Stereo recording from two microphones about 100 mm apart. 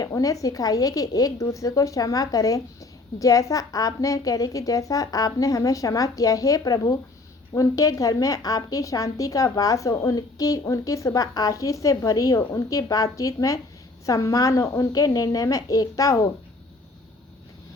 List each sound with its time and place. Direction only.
0.0 s a woman's voice: 35° left (ahead or behind)